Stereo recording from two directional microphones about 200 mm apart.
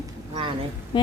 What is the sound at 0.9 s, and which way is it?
Speech, 25° left (ahead or behind).